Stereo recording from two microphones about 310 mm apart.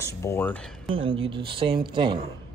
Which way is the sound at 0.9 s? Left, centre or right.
Centre.